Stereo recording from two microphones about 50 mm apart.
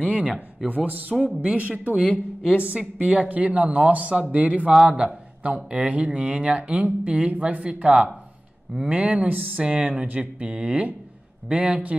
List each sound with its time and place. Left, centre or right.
0.0 s speech: right
2.0 s speech: centre